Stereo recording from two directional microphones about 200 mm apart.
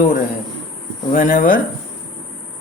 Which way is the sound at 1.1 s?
40° left (ahead or behind).